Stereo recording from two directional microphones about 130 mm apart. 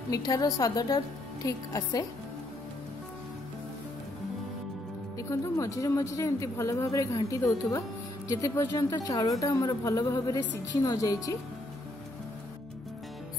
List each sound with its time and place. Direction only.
0.1 s speech: 30° left (ahead or behind)
5.1 s speech: 25° left (ahead or behind)